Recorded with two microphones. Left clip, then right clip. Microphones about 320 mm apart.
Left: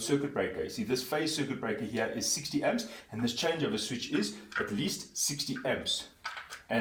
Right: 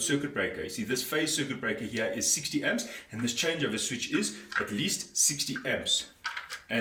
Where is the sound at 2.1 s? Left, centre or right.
Centre.